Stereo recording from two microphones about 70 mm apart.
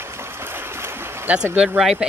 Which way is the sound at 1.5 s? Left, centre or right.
Centre.